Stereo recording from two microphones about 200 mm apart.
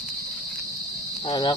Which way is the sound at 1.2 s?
20° left (ahead or behind).